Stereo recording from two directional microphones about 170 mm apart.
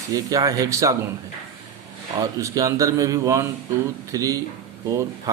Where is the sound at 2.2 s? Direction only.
20° right (ahead or behind).